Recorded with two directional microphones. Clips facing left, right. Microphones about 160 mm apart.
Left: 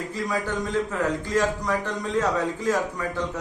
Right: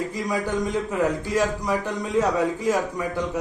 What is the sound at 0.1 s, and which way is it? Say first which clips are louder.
A man's voice: right 2 dB; 15° right (ahead or behind).